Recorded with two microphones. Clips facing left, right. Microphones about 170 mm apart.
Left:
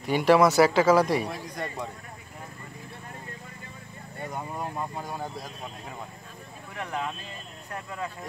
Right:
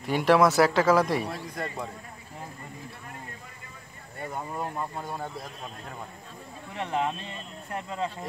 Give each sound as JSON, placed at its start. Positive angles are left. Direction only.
{"t": 0.0, "sound": "speech", "side_deg": 0}
{"t": 4.9, "sound": "speech", "side_deg": 0}
{"t": 6.7, "sound": "speech", "side_deg": -25}